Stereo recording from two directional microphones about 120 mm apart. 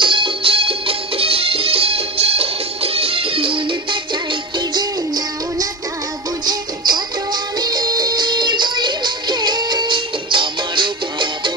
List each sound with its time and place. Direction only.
0.0 s music: 45° right (ahead or behind)